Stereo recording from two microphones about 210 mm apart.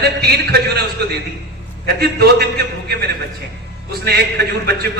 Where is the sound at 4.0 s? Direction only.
50° right (ahead or behind).